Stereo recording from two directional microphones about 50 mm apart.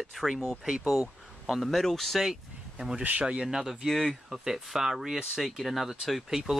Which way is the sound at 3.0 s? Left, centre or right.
Right.